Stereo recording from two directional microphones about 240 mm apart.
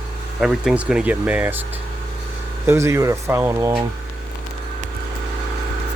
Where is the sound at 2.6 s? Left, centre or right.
Centre.